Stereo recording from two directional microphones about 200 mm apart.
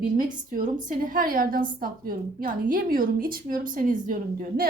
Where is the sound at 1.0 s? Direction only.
45° right (ahead or behind).